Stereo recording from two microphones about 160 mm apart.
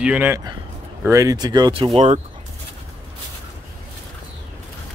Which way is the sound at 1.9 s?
45° right (ahead or behind).